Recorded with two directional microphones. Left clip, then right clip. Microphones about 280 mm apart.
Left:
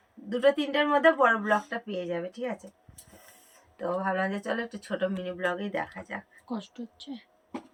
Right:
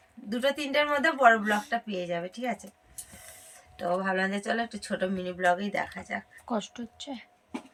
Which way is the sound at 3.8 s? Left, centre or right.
Centre.